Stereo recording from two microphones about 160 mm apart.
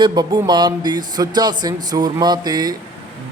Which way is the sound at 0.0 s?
25° right (ahead or behind).